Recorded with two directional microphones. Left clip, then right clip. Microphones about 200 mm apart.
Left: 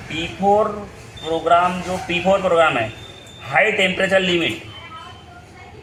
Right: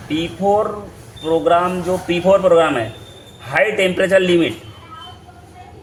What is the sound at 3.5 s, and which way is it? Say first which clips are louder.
Speech: right 1 dB; 45° right (ahead or behind).